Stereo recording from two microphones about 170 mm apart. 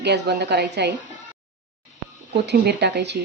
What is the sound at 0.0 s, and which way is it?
Speech, 75° right (ahead or behind).